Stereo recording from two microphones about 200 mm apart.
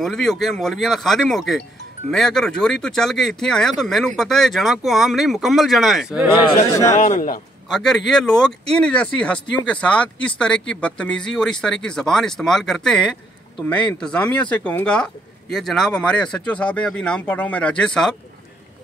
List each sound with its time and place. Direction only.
0.0 s speech: centre (ahead or behind)
6.7 s speech: 15° left (ahead or behind)
7.0 s a man's voice: 40° left (ahead or behind)
7.7 s speech: centre (ahead or behind)